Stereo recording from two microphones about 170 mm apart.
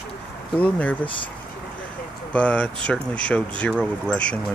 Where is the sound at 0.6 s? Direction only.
10° left (ahead or behind).